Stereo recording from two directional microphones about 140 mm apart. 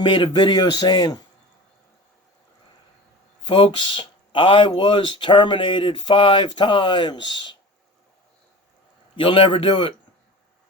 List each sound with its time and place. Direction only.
0.0 s speech: 35° left (ahead or behind)
3.4 s speech: 35° left (ahead or behind)
9.1 s speech: 40° left (ahead or behind)